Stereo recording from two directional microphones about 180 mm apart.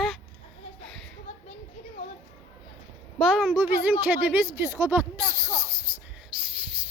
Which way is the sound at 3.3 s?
10° right (ahead or behind).